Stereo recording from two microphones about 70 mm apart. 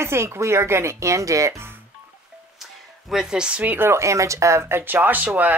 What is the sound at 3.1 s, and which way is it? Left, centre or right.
Speech, centre.